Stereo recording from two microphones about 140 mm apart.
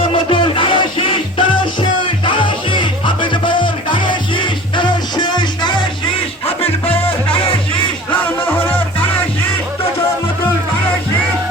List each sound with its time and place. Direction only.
0.3 s music: 35° left (ahead or behind)